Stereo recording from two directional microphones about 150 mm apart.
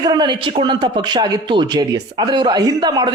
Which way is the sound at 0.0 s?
30° right (ahead or behind).